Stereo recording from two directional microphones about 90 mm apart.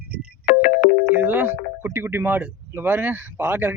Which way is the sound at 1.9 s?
25° right (ahead or behind).